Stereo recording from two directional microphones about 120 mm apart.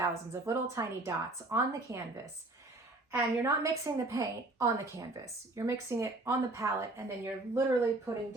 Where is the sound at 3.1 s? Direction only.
25° right (ahead or behind).